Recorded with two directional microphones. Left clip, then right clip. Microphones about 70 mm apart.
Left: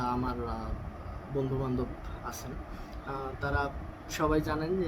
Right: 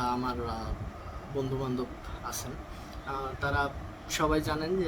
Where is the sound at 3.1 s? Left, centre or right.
Centre.